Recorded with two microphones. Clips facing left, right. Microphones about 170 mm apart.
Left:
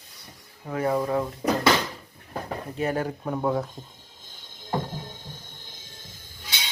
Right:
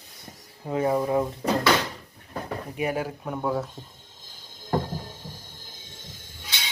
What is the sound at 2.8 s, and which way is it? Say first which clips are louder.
Speech: left 1 dB; 10° right (ahead or behind).